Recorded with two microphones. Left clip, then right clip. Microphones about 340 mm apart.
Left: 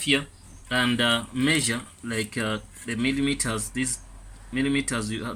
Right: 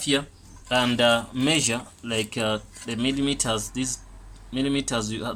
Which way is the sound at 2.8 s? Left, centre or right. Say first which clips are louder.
Left 1 dB; right.